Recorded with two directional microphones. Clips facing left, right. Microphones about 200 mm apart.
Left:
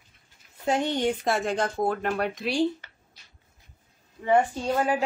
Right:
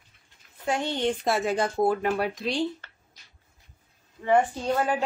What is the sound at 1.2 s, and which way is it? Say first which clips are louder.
Speech: right 1 dB; 5° right (ahead or behind).